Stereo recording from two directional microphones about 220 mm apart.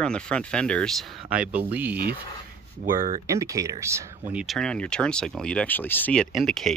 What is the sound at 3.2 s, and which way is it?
Speech, 15° right (ahead or behind).